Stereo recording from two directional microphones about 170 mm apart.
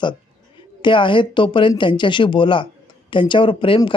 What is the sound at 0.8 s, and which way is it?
Speech, 30° left (ahead or behind).